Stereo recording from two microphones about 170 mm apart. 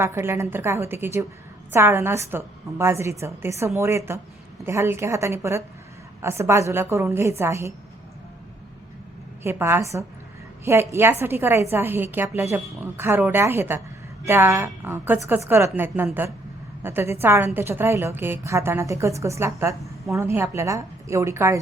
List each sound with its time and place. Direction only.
0.0 s a woman's voice: 15° right (ahead or behind)
9.4 s a woman's voice: 15° right (ahead or behind)